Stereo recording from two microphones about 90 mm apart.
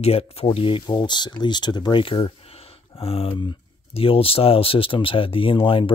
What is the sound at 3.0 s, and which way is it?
Speech, 90° left.